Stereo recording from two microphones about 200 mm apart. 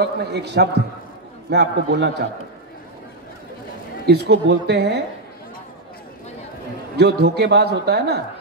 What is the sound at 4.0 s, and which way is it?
A man's voice, 55° right (ahead or behind).